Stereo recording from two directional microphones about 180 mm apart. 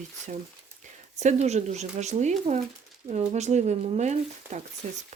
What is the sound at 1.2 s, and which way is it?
Speech, 40° right (ahead or behind).